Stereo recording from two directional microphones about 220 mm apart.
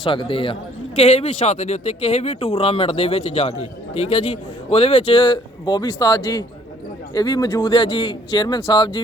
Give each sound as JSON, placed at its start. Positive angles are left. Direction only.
{"t": 0.0, "sound": "speech", "side_deg": 20}